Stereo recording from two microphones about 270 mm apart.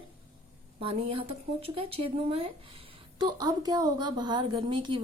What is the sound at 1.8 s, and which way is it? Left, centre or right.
Speech, right.